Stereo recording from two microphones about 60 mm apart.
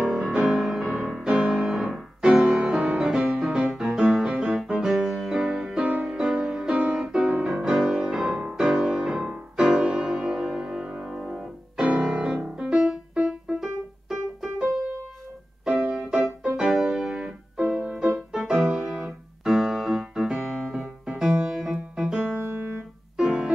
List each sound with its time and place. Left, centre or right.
0.3 s music: centre
5.8 s music: right
6.0 s music: centre
7.4 s music: centre
11.1 s piano: centre
12.3 s music: centre
13.6 s keyboard: centre
15.6 s music: centre
17.1 s music: centre
18.0 s music: centre
18.4 s music: right
18.8 s keyboard: centre
21.0 s music: centre
22.8 s piano: centre